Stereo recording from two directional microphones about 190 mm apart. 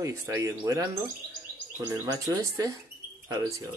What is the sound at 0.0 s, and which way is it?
Speech, 15° right (ahead or behind).